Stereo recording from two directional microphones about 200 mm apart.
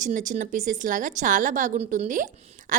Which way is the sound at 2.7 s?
45° right (ahead or behind).